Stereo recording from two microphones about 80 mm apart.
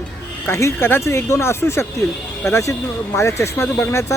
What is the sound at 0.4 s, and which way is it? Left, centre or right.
Speech, left.